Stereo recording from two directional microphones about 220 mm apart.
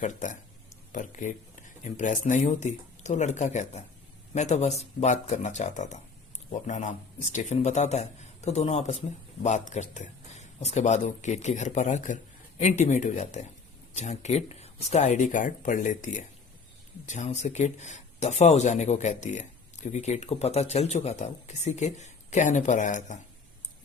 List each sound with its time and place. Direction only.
0.0 s speech: 35° left (ahead or behind)